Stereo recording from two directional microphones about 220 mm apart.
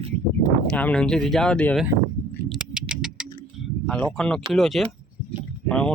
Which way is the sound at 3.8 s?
5° left (ahead or behind).